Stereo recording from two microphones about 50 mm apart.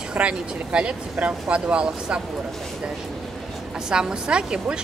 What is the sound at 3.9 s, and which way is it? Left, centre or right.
Speech, centre.